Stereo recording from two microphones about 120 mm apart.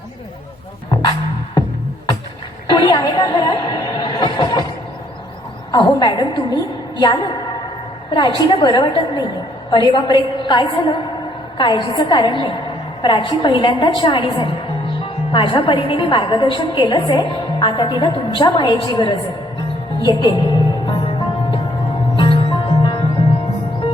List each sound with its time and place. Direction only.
2.6 s speech: 40° left (ahead or behind)
5.7 s a woman's voice: 40° left (ahead or behind)
20.0 s music: 35° left (ahead or behind)